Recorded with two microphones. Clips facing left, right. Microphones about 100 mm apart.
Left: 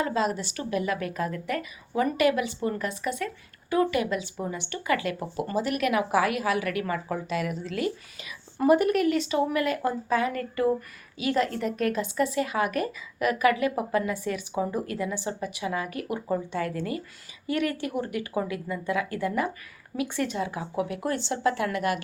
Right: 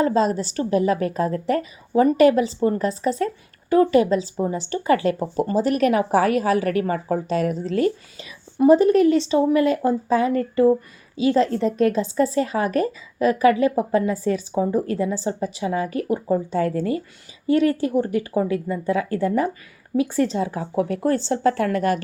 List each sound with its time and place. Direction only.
0.0 s a woman's voice: 35° right (ahead or behind)
8.5 s a woman's voice: 25° right (ahead or behind)